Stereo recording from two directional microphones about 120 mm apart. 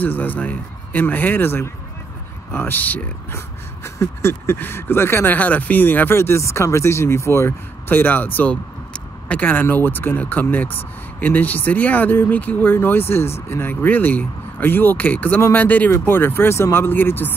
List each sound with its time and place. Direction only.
0.0 s speech: 15° left (ahead or behind)